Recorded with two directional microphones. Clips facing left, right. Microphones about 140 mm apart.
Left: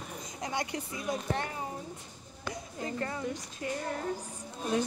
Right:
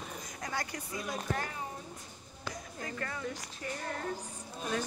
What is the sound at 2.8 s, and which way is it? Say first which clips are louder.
Speech: left 4 dB; 25° left (ahead or behind).